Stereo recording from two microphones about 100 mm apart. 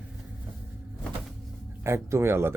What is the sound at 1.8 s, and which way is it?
Speech, 25° right (ahead or behind).